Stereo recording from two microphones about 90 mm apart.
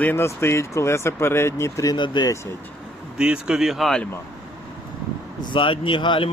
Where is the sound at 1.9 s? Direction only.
60° left (ahead or behind).